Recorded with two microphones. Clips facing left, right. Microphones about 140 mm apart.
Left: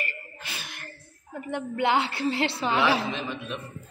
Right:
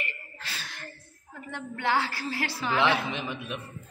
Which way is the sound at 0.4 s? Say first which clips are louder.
Left 1 dB; 15° left (ahead or behind).